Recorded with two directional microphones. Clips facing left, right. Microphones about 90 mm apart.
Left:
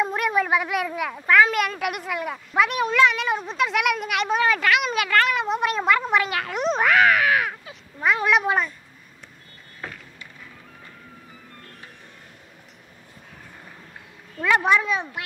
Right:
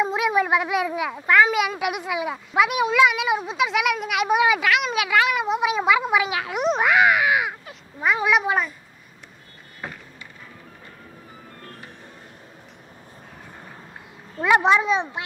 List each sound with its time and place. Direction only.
0.1 s speech: 5° right (ahead or behind)
4.3 s speech: 10° right (ahead or behind)
14.4 s speech: 20° right (ahead or behind)